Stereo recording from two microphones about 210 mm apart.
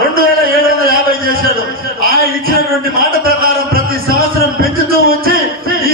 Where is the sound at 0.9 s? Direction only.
45° right (ahead or behind).